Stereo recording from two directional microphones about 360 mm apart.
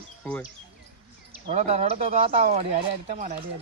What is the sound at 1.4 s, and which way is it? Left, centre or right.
Speech, centre.